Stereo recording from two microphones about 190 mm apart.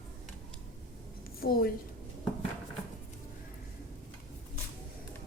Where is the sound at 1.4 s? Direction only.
50° left (ahead or behind).